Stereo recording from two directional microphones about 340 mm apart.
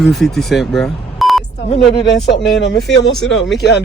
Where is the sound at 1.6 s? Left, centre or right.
Centre.